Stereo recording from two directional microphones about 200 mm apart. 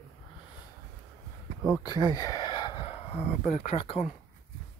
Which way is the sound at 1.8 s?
20° left (ahead or behind).